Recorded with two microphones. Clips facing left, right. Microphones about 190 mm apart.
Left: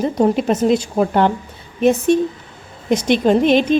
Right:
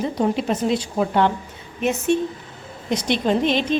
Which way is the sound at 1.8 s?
35° left (ahead or behind).